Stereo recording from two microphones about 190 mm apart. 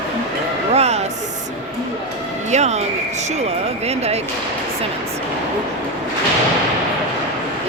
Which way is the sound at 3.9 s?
35° right (ahead or behind).